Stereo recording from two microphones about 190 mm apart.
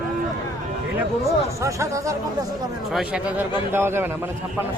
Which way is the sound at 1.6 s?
15° right (ahead or behind).